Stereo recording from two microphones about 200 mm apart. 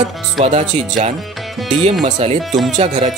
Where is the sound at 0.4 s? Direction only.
35° right (ahead or behind).